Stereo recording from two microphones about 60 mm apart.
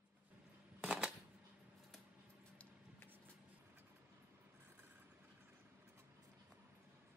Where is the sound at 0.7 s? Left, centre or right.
Centre.